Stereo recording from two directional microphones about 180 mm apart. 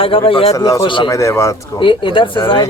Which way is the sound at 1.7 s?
30° left (ahead or behind).